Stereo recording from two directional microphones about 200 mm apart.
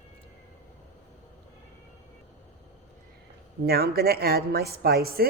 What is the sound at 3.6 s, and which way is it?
Speech, 50° right (ahead or behind).